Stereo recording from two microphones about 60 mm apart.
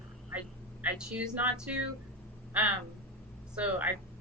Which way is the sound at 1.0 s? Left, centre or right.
Centre.